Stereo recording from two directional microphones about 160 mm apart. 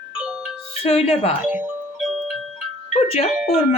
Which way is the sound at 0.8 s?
35° left (ahead or behind).